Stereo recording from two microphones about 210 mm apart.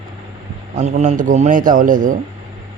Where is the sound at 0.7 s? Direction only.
35° right (ahead or behind).